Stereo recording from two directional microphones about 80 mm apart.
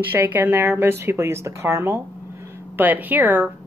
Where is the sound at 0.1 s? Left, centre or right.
Right.